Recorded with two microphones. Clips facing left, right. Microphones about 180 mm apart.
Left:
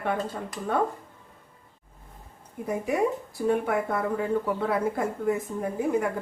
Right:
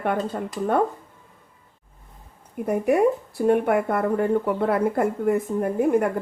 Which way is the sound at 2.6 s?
65° right (ahead or behind).